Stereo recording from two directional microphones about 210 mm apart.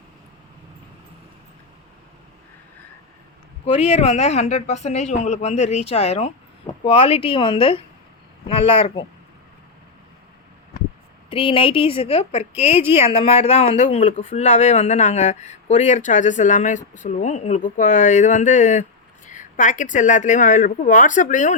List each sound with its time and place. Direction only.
3.7 s speech: 30° left (ahead or behind)
11.3 s speech: 25° left (ahead or behind)